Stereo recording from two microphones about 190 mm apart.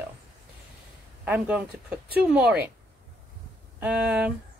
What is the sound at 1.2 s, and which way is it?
Speech, 5° right (ahead or behind).